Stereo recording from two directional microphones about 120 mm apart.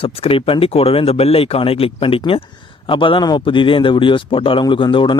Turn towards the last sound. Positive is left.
turn(degrees=45)  # may be behind; listen again after turning